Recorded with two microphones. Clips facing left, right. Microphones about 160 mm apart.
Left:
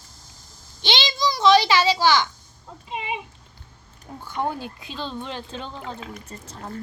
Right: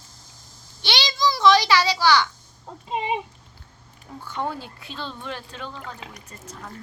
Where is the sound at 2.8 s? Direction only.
35° right (ahead or behind).